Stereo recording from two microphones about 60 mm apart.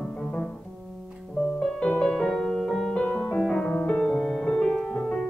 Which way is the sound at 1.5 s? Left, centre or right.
Centre.